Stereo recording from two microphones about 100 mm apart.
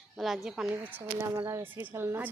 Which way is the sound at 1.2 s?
30° right (ahead or behind).